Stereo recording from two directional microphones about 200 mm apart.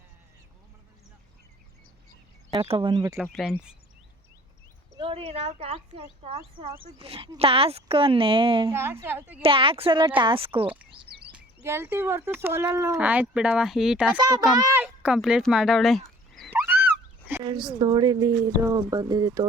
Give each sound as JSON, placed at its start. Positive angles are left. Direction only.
{"t": 2.5, "sound": "a woman's voice", "side_deg": -25}
{"t": 3.2, "sound": "speech", "side_deg": 0}
{"t": 4.9, "sound": "a woman's voice", "side_deg": -30}
{"t": 8.7, "sound": "speech", "side_deg": -15}
{"t": 9.4, "sound": "a woman's voice", "side_deg": -25}
{"t": 11.3, "sound": "speech", "side_deg": -10}
{"t": 16.0, "sound": "a sound", "side_deg": 0}
{"t": 16.5, "sound": "a sound", "side_deg": -10}
{"t": 17.4, "sound": "a woman's voice", "side_deg": -20}